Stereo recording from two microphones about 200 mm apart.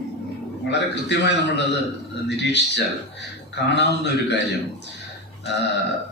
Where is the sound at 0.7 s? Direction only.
60° left (ahead or behind).